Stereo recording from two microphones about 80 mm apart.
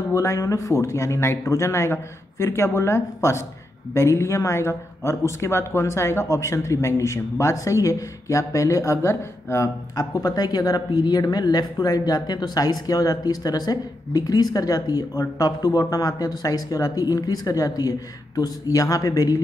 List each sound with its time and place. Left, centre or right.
0.1 s speech: left
9.9 s speech: left